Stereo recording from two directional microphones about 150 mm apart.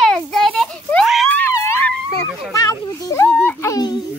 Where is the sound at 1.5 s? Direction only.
15° left (ahead or behind).